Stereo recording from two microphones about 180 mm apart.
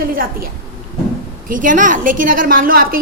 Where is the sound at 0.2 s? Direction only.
55° right (ahead or behind).